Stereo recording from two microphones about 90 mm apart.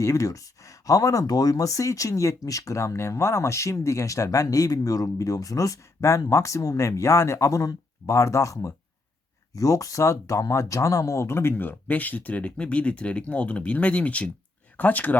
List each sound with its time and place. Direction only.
0.0 s speech: 35° left (ahead or behind); by 15.2 s 20° left (ahead or behind)